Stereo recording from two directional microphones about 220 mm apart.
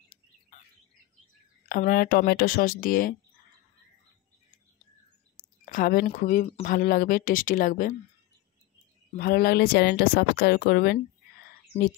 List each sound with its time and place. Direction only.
1.7 s speech: 40° left (ahead or behind)
5.7 s speech: 40° left (ahead or behind)
9.1 s speech: 45° left (ahead or behind)